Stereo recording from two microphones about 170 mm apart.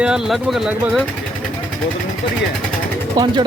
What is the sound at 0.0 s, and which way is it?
Speech, 5° right (ahead or behind).